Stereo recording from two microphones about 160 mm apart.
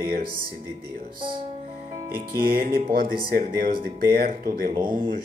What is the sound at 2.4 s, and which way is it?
Speech, 75° right (ahead or behind).